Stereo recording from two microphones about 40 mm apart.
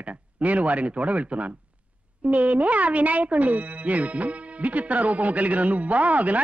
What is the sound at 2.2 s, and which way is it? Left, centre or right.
Speech, right.